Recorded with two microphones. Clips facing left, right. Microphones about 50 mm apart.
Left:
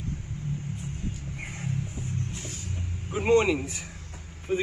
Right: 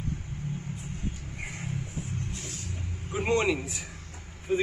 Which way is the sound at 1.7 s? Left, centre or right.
Right.